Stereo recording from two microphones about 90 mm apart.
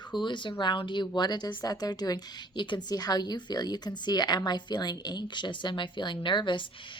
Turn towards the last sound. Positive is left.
turn(degrees=60)  # may be behind; listen again after turning